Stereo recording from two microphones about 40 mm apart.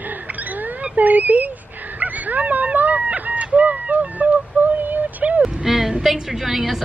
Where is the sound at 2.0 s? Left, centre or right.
Right.